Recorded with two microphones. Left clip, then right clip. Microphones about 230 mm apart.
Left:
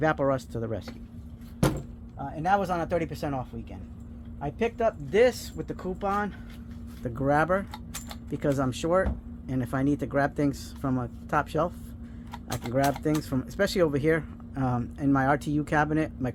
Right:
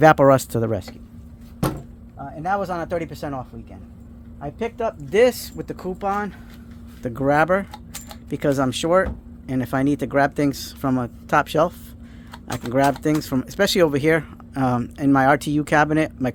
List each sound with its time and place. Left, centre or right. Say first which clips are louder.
0.0 s speech: right 12 dB; right
2.1 s speech: right 2 dB; centre
5.1 s speech: right 7 dB; right